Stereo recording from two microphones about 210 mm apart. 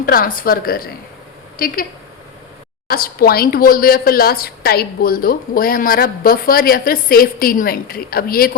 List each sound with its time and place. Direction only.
0.0 s a woman's voice: 45° left (ahead or behind)
2.9 s a woman's voice: 45° left (ahead or behind)